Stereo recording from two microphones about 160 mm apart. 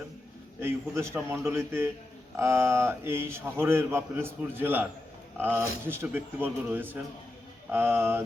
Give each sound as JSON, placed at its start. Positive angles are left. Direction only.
{"t": 0.6, "sound": "a man's voice", "side_deg": -15}